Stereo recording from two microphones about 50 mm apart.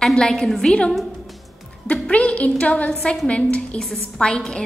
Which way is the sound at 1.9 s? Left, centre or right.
Left.